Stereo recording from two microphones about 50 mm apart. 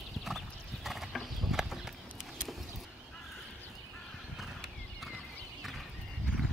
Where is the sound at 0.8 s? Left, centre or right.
Centre.